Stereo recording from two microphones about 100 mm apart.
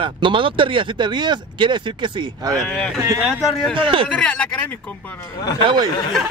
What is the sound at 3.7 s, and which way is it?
Speech, 55° right (ahead or behind).